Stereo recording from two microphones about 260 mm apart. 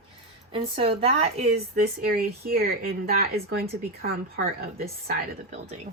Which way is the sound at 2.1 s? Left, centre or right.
Right.